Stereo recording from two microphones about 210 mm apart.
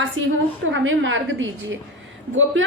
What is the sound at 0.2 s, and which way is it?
A woman's voice, 65° right (ahead or behind).